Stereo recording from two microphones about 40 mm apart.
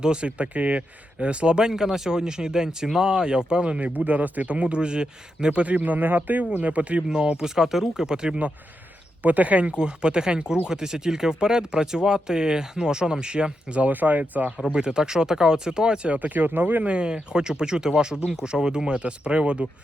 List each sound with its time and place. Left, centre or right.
0.0 s speech: right
7.1 s speech: right
9.2 s speech: right
13.9 s speech: right
14.7 s speech: right
16.1 s speech: right
16.8 s speech: right